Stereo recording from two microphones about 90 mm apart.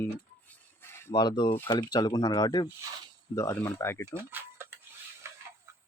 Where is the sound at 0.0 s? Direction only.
20° left (ahead or behind).